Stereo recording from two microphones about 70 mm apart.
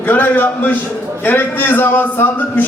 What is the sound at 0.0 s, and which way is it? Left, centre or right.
A man's voice, left.